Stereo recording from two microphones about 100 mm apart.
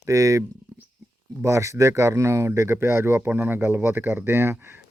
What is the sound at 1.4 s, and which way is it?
Speech, 30° right (ahead or behind).